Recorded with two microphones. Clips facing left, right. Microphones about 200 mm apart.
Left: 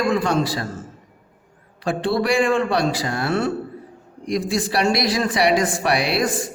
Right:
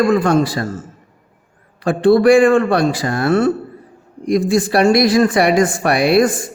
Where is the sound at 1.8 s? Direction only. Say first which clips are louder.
Right 10 dB; 50° right (ahead or behind).